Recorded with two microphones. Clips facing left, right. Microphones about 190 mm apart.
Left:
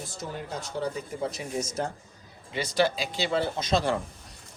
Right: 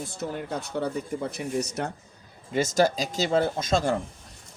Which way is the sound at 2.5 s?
45° right (ahead or behind).